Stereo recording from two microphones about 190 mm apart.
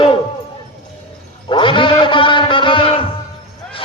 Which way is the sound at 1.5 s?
25° left (ahead or behind).